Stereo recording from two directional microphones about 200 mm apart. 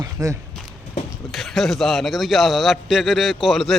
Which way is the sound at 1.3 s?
Centre (ahead or behind).